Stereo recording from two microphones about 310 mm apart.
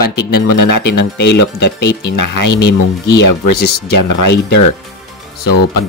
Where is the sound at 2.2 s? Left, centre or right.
Left.